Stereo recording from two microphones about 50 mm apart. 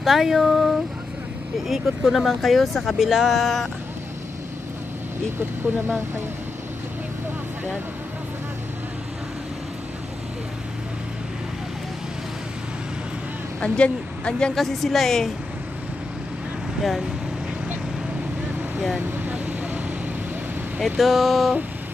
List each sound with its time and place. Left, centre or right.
0.0 s speech: centre
5.4 s speech: right
13.6 s speech: left
14.5 s speech: centre
18.9 s vehicle: right
19.3 s vehicle: right
21.0 s speech: centre